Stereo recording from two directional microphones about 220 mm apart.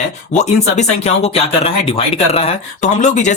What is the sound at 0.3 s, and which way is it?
Speech, 30° left (ahead or behind).